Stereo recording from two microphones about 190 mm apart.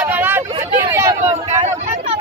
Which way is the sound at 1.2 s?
35° right (ahead or behind).